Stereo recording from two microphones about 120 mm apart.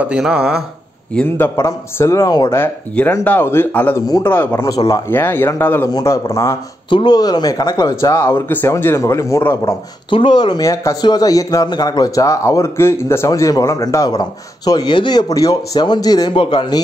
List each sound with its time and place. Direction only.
0.0 s speech: 10° right (ahead or behind)
1.1 s speech: 15° left (ahead or behind)
2.5 s speech: 20° left (ahead or behind)
4.6 s speech: 30° left (ahead or behind)
5.1 s speech: 20° left (ahead or behind)
5.9 s speech: 30° left (ahead or behind)
6.9 s speech: 40° left (ahead or behind); by 9.8 s 25° left (ahead or behind)
10.0 s speech: 40° left (ahead or behind)